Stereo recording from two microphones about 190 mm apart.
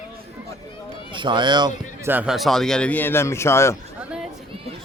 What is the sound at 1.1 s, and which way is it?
Speech, 25° right (ahead or behind).